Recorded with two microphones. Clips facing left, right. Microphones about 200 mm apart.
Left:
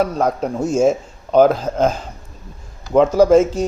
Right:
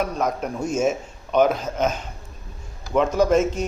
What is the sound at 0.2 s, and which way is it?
A man's voice, 30° left (ahead or behind).